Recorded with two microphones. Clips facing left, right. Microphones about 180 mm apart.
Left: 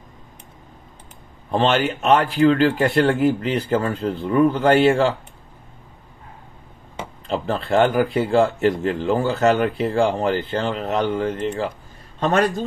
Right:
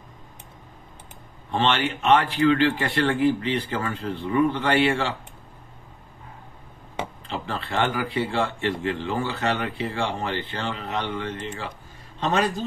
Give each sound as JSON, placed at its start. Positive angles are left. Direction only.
{"t": 1.5, "sound": "speech", "side_deg": 40}
{"t": 7.2, "sound": "speech", "side_deg": 35}
{"t": 12.2, "sound": "a man's voice", "side_deg": 50}